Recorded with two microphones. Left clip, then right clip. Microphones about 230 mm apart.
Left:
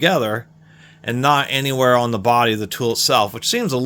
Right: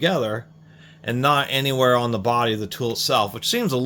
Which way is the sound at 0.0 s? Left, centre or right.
Left.